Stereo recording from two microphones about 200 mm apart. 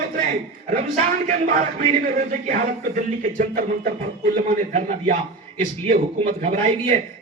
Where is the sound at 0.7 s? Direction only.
40° right (ahead or behind).